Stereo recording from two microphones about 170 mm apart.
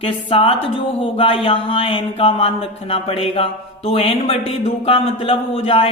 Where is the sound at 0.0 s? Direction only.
30° left (ahead or behind).